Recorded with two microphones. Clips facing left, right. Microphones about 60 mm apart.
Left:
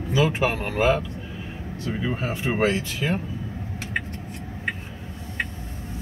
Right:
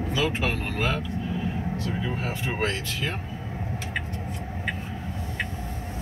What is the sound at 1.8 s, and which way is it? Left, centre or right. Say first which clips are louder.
Speech: left 7 dB; left.